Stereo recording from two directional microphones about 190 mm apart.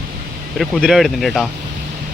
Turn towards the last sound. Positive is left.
turn(degrees=0)  # may be behind; listen again after turning